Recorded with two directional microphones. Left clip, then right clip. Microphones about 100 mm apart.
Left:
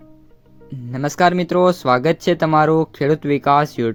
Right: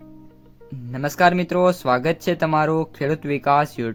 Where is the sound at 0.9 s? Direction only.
30° left (ahead or behind).